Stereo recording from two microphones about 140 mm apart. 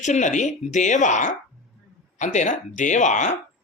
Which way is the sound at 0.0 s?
60° left (ahead or behind).